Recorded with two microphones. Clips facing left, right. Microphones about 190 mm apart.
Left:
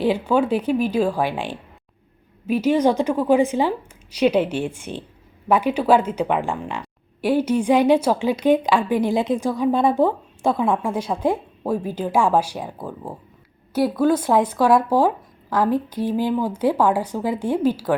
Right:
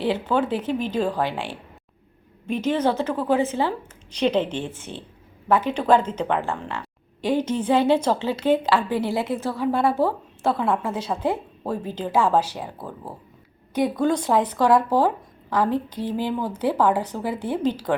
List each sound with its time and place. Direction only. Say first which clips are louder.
0.0 s a woman's voice: left 3 dB; 10° left (ahead or behind)
13.7 s a woman's voice: left 3 dB; 5° left (ahead or behind)